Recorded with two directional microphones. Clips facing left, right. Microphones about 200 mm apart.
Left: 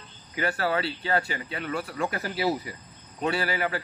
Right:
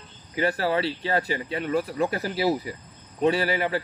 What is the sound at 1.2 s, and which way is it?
Speech, 35° right (ahead or behind).